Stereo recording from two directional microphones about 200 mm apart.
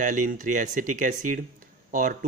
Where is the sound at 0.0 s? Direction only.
40° right (ahead or behind).